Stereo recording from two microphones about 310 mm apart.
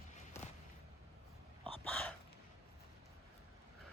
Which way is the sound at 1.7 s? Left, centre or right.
Centre.